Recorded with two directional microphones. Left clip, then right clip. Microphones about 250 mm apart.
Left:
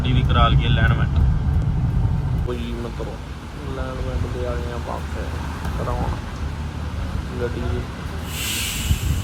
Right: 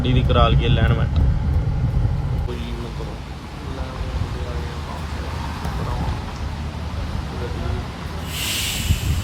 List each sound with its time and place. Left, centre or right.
0.0 s speech: centre